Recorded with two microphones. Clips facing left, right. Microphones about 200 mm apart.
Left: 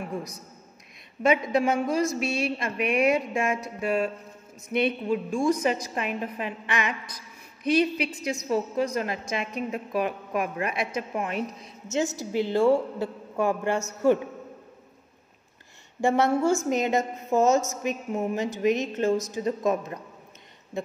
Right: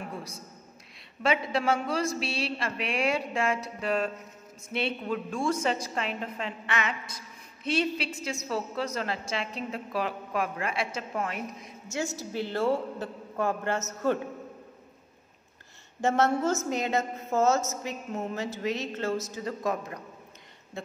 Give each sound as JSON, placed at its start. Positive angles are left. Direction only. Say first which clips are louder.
{"t": 1.4, "sound": "a woman's voice", "louder": "left 4 dB", "side_deg": 15}
{"t": 2.2, "sound": "a woman's voice", "louder": "left 4 dB", "side_deg": -35}
{"t": 3.1, "sound": "a woman's voice", "louder": "left 4 dB", "side_deg": 15}
{"t": 4.7, "sound": "a woman's voice", "louder": "left 6 dB", "side_deg": 15}
{"t": 16.0, "sound": "a woman's voice", "louder": "left 3 dB", "side_deg": 15}